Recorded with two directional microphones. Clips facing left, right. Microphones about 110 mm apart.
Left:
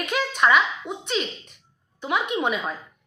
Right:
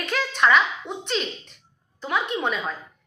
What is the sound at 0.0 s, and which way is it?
A woman's voice, 10° left (ahead or behind).